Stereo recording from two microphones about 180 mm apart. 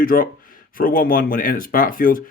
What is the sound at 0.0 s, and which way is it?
Speech, 55° left (ahead or behind).